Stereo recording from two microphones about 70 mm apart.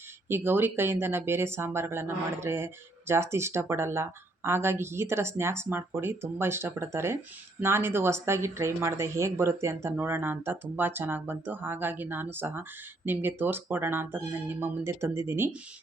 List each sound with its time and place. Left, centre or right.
0.3 s speech: right